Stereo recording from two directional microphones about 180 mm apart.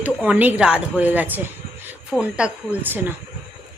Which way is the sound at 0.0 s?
5° right (ahead or behind).